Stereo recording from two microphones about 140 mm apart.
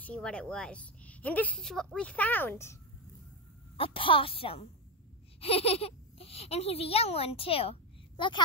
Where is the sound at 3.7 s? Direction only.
40° left (ahead or behind).